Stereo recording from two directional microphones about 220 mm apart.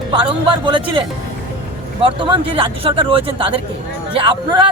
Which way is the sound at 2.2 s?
25° right (ahead or behind).